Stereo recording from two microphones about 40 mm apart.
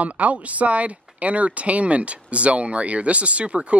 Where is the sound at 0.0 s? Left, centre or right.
Right.